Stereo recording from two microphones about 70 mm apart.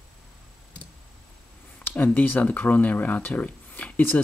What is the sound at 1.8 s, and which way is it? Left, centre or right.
Speech, left.